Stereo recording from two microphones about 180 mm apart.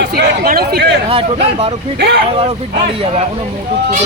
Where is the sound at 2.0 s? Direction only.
65° right (ahead or behind).